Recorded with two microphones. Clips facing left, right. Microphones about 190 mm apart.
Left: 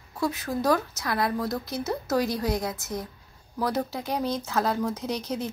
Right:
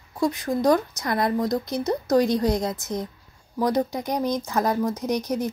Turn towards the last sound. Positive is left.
turn(degrees=-15)  # may be behind; listen again after turning